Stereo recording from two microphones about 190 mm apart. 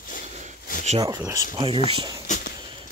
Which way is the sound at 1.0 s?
15° right (ahead or behind).